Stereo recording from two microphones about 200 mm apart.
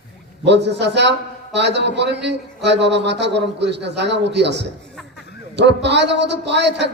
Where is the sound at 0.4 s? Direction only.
60° right (ahead or behind).